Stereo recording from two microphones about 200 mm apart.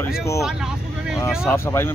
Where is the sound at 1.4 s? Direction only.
10° left (ahead or behind).